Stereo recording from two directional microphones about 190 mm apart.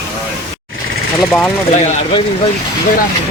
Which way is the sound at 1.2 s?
5° left (ahead or behind).